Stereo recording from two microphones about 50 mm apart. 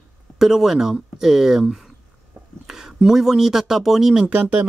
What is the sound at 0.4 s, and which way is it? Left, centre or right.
Speech, centre.